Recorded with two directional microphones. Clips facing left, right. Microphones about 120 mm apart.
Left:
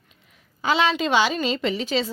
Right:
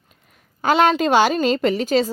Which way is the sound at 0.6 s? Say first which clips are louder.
Right 5 dB; 50° right (ahead or behind).